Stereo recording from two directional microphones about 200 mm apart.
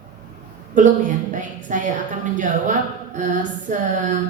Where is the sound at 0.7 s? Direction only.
40° right (ahead or behind).